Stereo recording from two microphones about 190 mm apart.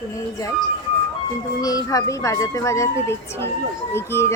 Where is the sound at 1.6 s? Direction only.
20° left (ahead or behind).